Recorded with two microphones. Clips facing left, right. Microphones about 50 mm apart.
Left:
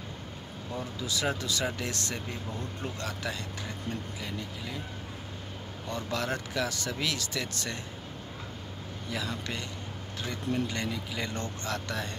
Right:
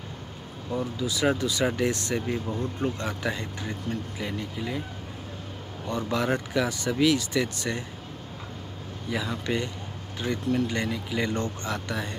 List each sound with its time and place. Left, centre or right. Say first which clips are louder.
0.7 s speech: right 6 dB; centre
5.9 s speech: right 6 dB; centre
9.1 s speech: right 7 dB; centre
10.7 s speech: right 5 dB; centre
11.3 s speech: right 5 dB; right
11.7 s speech: right 3 dB; centre